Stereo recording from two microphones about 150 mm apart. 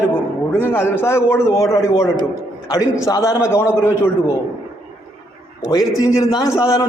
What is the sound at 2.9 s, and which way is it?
A man's voice, 20° left (ahead or behind).